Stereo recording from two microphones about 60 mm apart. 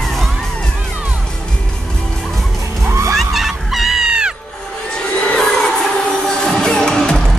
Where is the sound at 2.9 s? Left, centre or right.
Right.